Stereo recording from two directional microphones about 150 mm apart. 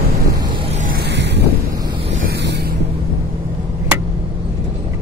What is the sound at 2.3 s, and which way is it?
Boat, 90° right.